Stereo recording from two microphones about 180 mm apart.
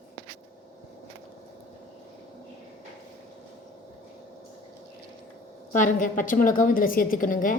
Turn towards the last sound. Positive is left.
turn(degrees=50)  # may be behind; listen again after turning